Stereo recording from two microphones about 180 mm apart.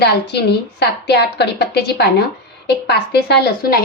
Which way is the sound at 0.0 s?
65° left (ahead or behind).